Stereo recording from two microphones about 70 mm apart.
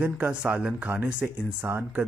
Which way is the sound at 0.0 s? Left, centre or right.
Centre.